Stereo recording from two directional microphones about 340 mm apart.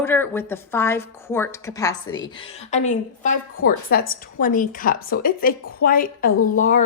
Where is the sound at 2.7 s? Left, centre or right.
Left.